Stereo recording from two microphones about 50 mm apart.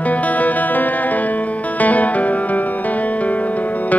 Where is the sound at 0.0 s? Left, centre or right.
Left.